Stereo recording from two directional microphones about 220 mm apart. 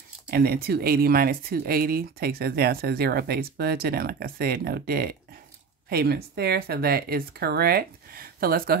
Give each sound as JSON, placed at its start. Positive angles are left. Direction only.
{"t": 0.3, "sound": "speech", "side_deg": -45}